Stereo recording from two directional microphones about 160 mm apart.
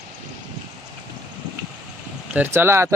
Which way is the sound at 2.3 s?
10° right (ahead or behind).